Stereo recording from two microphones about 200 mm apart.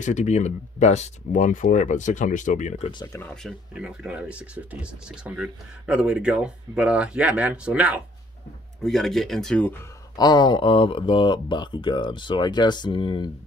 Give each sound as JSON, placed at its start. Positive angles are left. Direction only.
{"t": 0.0, "sound": "speech", "side_deg": 35}
{"t": 2.9, "sound": "speech", "side_deg": 20}
{"t": 3.2, "sound": "speech", "side_deg": 0}
{"t": 10.1, "sound": "speech", "side_deg": 20}